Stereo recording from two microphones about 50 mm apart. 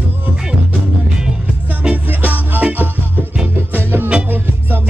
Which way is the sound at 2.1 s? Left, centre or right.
Right.